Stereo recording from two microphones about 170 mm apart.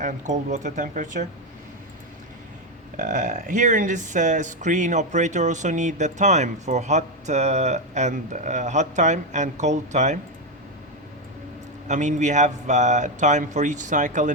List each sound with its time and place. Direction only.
0.0 s speech: 45° right (ahead or behind)
3.0 s speech: 50° right (ahead or behind)
11.9 s speech: 45° right (ahead or behind)